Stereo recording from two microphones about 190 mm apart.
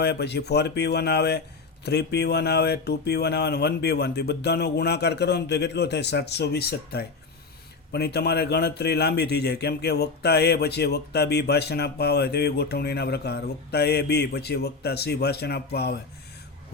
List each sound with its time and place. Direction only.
0.0 s a man's voice: 60° left (ahead or behind)